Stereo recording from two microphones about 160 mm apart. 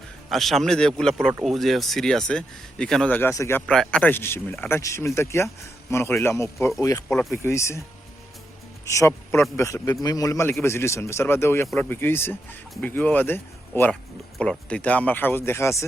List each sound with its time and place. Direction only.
0.3 s a man's voice: centre (ahead or behind); by 7.0 s 20° left (ahead or behind)
7.1 s speech: 5° left (ahead or behind)
7.3 s speech: 15° left (ahead or behind)
8.9 s a man's voice: 20° left (ahead or behind)